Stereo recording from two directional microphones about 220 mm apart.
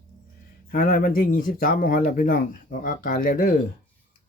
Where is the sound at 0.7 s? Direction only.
40° left (ahead or behind).